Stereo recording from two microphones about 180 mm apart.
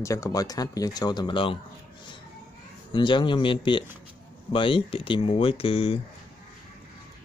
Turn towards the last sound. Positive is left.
turn(degrees=30)  # may be behind; listen again after turning